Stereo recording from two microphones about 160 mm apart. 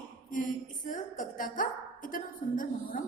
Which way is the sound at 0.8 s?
55° left (ahead or behind).